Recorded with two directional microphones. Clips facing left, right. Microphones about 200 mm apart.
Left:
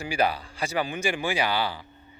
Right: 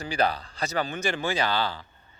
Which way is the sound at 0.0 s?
10° left (ahead or behind).